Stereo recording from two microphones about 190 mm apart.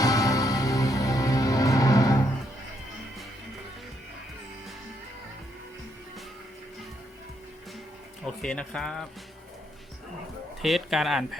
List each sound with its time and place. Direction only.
0.0 s music: 20° left (ahead or behind)
8.4 s speech: 5° left (ahead or behind)
10.6 s speech: centre (ahead or behind)